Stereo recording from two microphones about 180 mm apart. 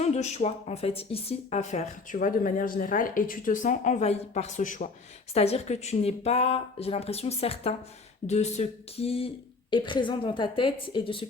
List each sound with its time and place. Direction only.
0.0 s speech: 40° left (ahead or behind)